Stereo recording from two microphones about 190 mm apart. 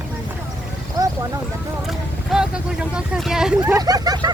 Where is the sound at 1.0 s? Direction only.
20° right (ahead or behind).